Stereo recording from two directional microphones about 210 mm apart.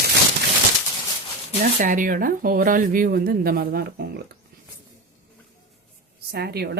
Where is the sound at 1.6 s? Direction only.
40° right (ahead or behind).